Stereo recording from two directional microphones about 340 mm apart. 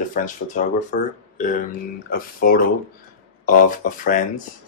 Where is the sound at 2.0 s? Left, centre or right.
Left.